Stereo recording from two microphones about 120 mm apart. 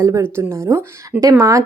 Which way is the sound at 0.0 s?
25° right (ahead or behind).